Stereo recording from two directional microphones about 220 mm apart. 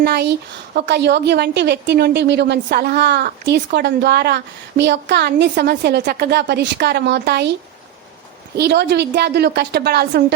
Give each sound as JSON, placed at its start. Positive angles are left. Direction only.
{"t": 0.0, "sound": "a woman's voice", "side_deg": -50}
{"t": 8.5, "sound": "a woman's voice", "side_deg": -50}